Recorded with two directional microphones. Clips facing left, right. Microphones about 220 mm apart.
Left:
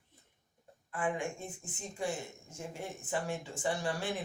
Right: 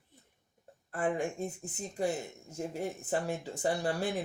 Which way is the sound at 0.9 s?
40° right (ahead or behind).